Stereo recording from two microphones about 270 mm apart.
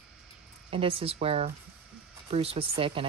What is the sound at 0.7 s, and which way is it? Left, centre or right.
Speech, centre.